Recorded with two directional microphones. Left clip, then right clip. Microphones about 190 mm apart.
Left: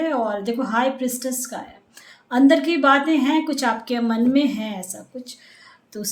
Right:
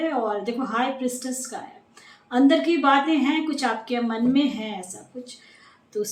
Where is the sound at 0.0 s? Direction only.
50° left (ahead or behind).